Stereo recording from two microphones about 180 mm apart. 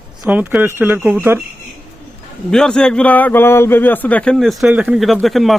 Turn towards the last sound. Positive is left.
turn(degrees=0)  # may be behind; listen again after turning